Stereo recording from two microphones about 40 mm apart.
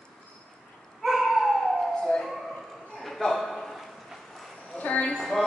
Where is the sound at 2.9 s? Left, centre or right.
Centre.